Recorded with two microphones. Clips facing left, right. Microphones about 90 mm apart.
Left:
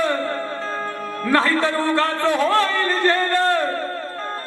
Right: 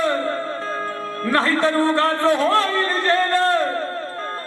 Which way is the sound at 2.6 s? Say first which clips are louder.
Left 1 dB; 20° right (ahead or behind).